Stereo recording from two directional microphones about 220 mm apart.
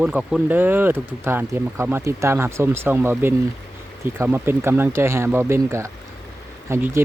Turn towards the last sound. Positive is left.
turn(degrees=-10)  # may be behind; listen again after turning